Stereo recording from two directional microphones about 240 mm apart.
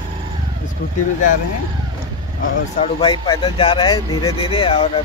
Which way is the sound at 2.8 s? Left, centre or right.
Centre.